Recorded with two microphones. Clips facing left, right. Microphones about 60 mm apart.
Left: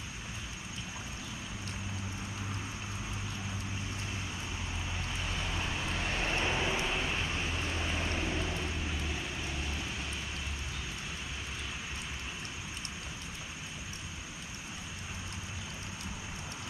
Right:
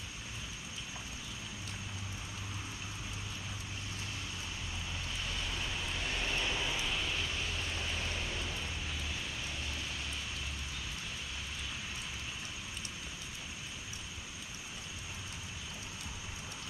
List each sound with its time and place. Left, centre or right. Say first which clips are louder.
5.2 s vehicle: left 3 dB; left